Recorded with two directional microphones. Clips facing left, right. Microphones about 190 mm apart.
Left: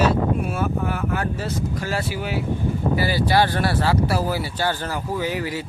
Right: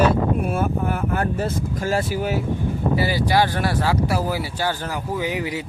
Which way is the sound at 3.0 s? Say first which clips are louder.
Even; 15° right (ahead or behind).